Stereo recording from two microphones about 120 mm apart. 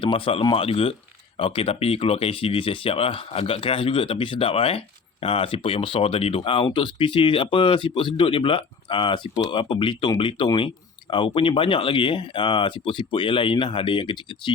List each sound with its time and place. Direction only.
0.0 s speech: 45° left (ahead or behind)